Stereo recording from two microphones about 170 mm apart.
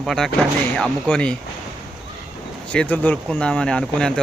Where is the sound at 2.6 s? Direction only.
10° left (ahead or behind).